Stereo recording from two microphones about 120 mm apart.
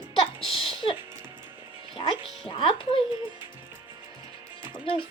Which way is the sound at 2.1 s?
45° left (ahead or behind).